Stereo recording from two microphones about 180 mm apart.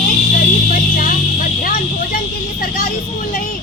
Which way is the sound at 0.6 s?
45° left (ahead or behind).